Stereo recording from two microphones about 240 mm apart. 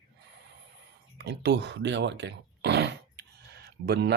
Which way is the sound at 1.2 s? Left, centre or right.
Right.